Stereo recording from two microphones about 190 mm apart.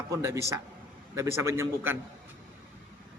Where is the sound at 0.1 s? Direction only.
15° right (ahead or behind).